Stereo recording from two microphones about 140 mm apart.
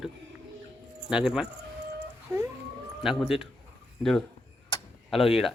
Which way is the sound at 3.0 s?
5° right (ahead or behind).